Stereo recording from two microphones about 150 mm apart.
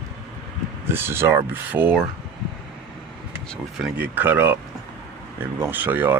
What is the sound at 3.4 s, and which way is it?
Speech, centre (ahead or behind).